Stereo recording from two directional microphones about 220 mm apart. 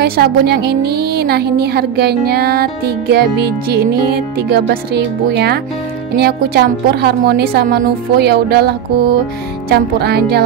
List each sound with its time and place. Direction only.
0.0 s a woman's voice: 45° right (ahead or behind)